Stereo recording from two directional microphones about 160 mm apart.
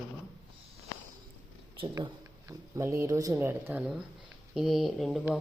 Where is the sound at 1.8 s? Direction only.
30° right (ahead or behind).